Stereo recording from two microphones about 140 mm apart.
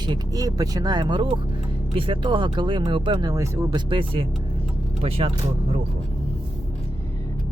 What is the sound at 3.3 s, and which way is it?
Speech, 25° right (ahead or behind).